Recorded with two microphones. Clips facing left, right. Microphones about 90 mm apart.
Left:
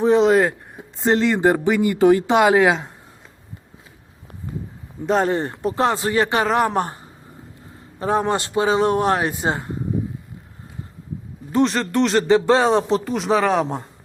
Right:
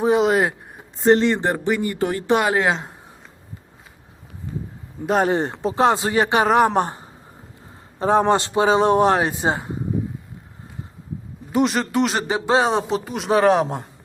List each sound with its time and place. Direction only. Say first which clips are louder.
0.0 s speech: left 2 dB; 5° right (ahead or behind)
1.4 s speech: left 4 dB; 15° left (ahead or behind)
5.0 s speech: even; 5° right (ahead or behind)
5.3 s speech: right 1 dB; 20° right (ahead or behind)
11.5 s speech: left 1 dB; 15° right (ahead or behind)
13.1 s speech: right 4 dB; 5° right (ahead or behind)